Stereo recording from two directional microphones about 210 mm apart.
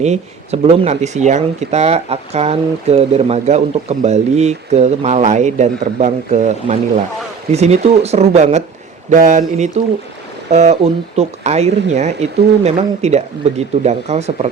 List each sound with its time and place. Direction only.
0.0 s speech: 30° right (ahead or behind)